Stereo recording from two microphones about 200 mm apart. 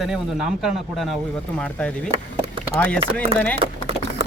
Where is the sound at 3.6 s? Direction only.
30° right (ahead or behind).